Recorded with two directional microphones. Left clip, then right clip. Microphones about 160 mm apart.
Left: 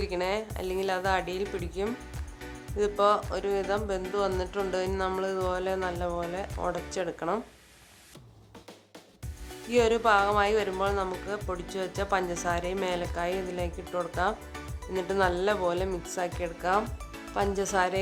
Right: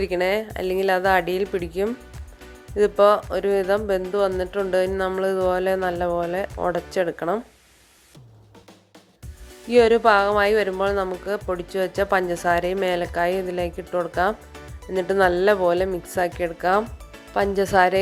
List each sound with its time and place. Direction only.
0.0 s speech: 35° right (ahead or behind)
9.6 s speech: 30° right (ahead or behind)